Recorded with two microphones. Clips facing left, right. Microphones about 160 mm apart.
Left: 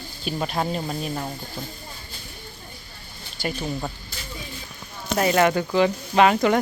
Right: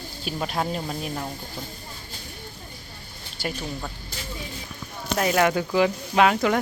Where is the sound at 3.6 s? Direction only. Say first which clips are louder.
Left 4 dB; 20° left (ahead or behind).